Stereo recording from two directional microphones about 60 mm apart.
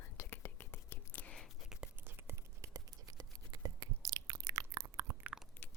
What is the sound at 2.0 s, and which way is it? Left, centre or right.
Whispering, right.